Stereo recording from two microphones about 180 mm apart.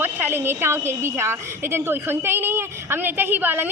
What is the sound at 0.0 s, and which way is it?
A woman's voice, 10° right (ahead or behind).